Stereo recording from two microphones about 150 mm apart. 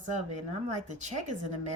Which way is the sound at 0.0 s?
50° right (ahead or behind).